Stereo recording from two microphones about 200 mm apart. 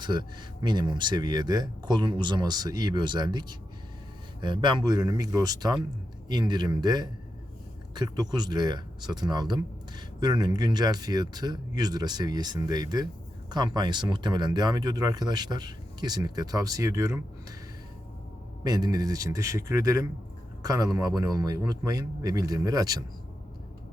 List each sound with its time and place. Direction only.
0.0 s speech: 20° right (ahead or behind)
18.6 s a man's voice: 20° right (ahead or behind)